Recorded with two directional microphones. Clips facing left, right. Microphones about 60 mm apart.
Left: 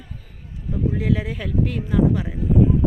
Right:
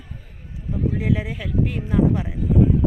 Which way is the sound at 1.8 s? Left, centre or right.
Right.